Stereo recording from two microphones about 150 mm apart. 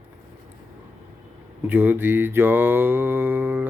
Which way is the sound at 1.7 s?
10° right (ahead or behind).